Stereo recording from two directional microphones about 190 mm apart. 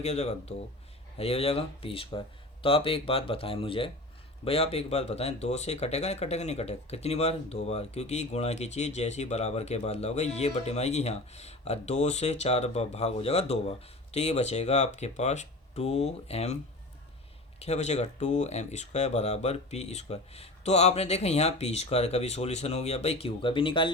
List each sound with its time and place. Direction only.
0.0 s speech: 35° left (ahead or behind)
17.6 s speech: 35° left (ahead or behind)